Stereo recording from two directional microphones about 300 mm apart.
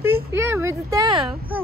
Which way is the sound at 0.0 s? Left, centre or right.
Centre.